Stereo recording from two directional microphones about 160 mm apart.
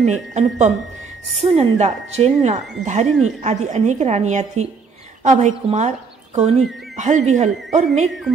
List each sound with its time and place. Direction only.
0.0 s a woman's voice: 45° right (ahead or behind)